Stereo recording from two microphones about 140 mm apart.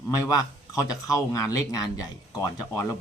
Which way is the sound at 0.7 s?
25° left (ahead or behind).